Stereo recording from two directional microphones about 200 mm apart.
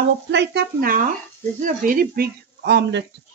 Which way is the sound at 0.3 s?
60° right (ahead or behind).